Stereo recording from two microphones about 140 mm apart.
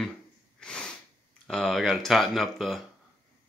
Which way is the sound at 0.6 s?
5° left (ahead or behind).